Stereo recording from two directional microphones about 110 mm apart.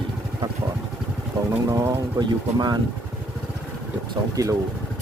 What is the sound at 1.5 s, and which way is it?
Speech, 30° right (ahead or behind).